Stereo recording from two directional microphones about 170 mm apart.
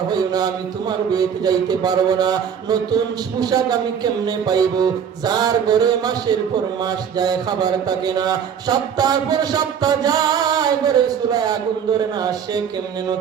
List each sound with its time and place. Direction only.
0.1 s mantra: 20° right (ahead or behind)